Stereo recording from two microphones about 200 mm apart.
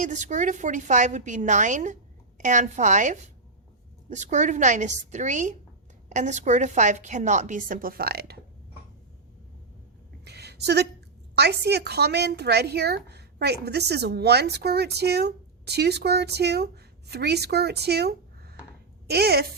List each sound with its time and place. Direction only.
0.0 s a woman's voice: 35° right (ahead or behind)
10.2 s a sound: 55° right (ahead or behind)
11.3 s a woman's voice: 55° right (ahead or behind)